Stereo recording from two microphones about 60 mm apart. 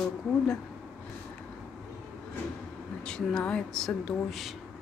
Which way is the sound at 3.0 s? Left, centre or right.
Centre.